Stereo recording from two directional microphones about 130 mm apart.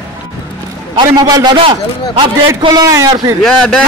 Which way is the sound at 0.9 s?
30° right (ahead or behind).